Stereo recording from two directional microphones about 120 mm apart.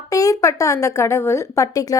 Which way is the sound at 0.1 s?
30° left (ahead or behind).